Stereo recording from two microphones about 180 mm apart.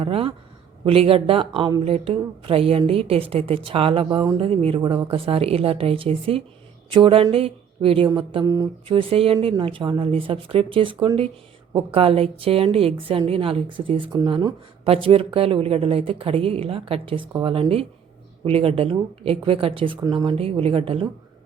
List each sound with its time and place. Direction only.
0.0 s a woman's voice: 30° right (ahead or behind)